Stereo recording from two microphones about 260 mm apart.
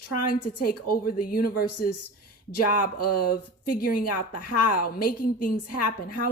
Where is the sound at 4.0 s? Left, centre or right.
Left.